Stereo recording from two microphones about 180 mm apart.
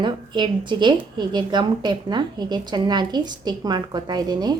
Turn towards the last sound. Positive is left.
turn(degrees=-20)  # may be behind; listen again after turning